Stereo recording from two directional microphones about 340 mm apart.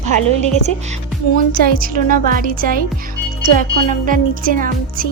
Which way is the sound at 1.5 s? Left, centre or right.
Right.